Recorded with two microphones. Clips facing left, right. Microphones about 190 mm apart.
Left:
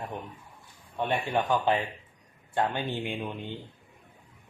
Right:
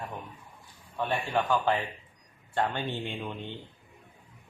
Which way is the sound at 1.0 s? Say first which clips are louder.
Left 1 dB; 15° left (ahead or behind).